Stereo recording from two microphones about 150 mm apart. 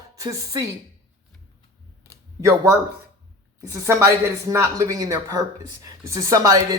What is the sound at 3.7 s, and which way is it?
Speech, 20° right (ahead or behind).